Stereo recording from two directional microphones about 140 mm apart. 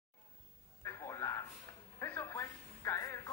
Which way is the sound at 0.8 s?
20° left (ahead or behind).